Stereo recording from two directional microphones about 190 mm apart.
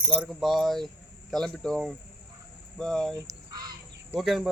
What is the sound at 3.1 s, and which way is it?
Crow, 20° right (ahead or behind).